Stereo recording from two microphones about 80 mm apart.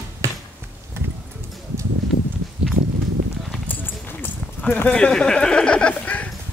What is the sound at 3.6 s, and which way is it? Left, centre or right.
Run, left.